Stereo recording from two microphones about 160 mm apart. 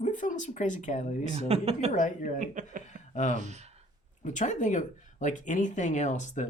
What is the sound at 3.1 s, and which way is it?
Speech, 50° left (ahead or behind).